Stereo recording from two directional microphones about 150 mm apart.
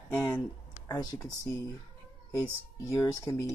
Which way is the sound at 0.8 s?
25° left (ahead or behind).